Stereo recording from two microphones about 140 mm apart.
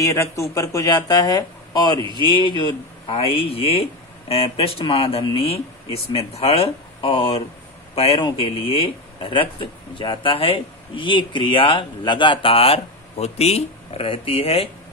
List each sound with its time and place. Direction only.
0.0 s speech: 20° left (ahead or behind)
2.0 s speech: 35° right (ahead or behind)
2.4 s a man's voice: 35° left (ahead or behind)